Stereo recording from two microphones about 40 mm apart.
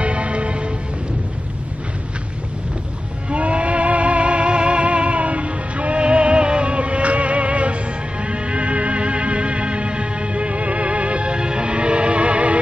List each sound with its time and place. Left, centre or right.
0.0 s music: right
3.3 s music: right